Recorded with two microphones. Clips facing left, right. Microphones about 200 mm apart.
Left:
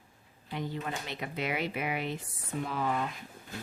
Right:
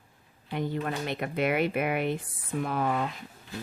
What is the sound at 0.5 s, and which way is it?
Speech, 55° right (ahead or behind).